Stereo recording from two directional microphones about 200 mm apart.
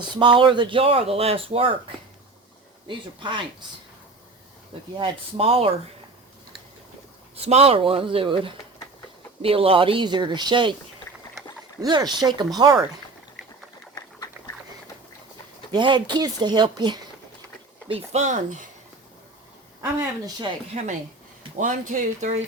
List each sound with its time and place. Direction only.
0.1 s speech: 25° right (ahead or behind)
2.8 s speech: 25° right (ahead or behind)
4.9 s speech: 25° right (ahead or behind)
7.4 s speech: 30° right (ahead or behind)
11.8 s speech: 20° right (ahead or behind)
13.9 s a sound: 15° left (ahead or behind)
15.7 s speech: 25° right (ahead or behind)
20.0 s speech: 15° right (ahead or behind)
20.7 s speech: 35° right (ahead or behind)